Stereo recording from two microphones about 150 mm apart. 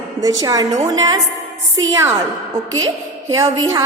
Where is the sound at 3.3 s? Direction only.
25° right (ahead or behind).